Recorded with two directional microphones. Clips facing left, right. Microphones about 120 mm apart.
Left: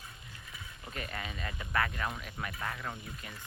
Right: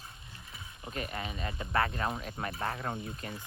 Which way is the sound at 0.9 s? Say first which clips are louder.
Right 3 dB; 20° right (ahead or behind).